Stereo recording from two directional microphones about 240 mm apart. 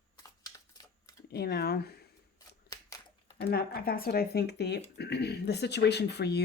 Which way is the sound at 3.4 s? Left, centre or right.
Left.